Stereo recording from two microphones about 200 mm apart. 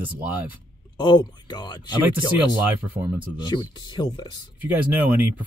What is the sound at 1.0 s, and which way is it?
Speech, 20° left (ahead or behind).